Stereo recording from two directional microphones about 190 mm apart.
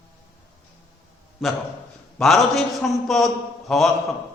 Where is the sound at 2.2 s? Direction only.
Centre (ahead or behind).